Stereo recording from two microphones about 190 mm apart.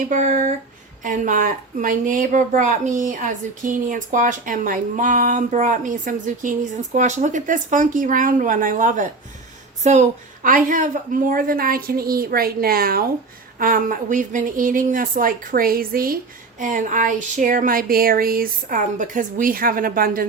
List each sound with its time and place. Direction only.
0.1 s a woman's voice: 45° right (ahead or behind)